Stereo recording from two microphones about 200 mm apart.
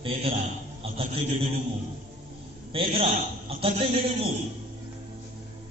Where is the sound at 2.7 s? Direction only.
30° right (ahead or behind).